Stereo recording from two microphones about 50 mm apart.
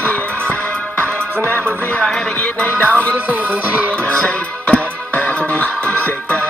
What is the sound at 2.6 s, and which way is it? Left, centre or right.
Music, left.